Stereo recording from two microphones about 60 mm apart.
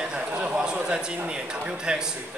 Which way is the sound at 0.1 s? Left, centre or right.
Centre.